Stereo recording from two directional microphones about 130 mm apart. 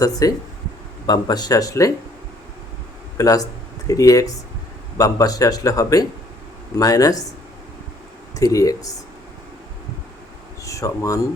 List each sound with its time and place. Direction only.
0.0 s speech: 25° left (ahead or behind)
3.2 s speech: 30° left (ahead or behind)
8.4 s speech: 25° left (ahead or behind)
10.6 s a sound: 25° left (ahead or behind)